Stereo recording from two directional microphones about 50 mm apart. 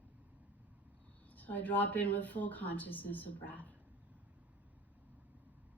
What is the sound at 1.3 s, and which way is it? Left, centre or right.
Speech, left.